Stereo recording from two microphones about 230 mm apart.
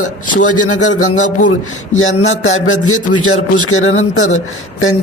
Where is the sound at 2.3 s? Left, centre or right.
Left.